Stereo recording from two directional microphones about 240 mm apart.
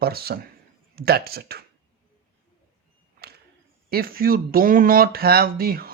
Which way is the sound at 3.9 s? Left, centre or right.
Right.